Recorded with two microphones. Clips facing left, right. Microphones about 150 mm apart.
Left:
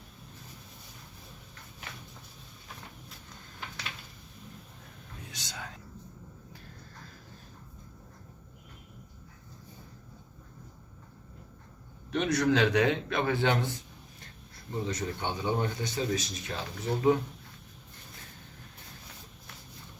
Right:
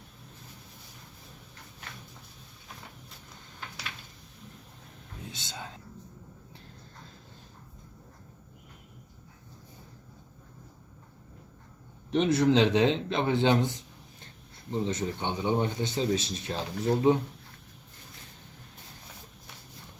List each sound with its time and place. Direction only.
5.3 s whispering: 25° right (ahead or behind)
12.1 s speech: 25° right (ahead or behind)
14.7 s speech: 25° right (ahead or behind)